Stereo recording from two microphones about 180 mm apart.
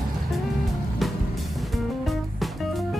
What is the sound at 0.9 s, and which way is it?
Music, centre (ahead or behind).